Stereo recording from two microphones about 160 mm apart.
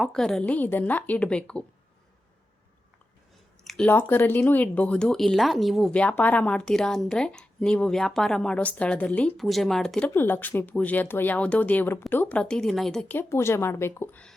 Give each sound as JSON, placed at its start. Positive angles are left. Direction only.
{"t": 0.0, "sound": "speech", "side_deg": 5}
{"t": 3.6, "sound": "speech", "side_deg": 5}